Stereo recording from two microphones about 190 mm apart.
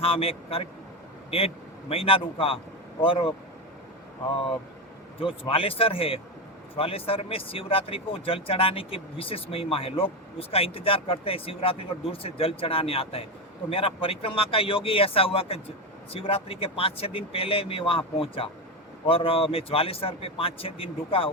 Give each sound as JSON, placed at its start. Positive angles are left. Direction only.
{"t": 0.0, "sound": "speech", "side_deg": 30}
{"t": 5.2, "sound": "speech", "side_deg": 30}